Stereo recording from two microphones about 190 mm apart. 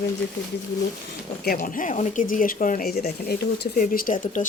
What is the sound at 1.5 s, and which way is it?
A woman's voice, 45° left (ahead or behind).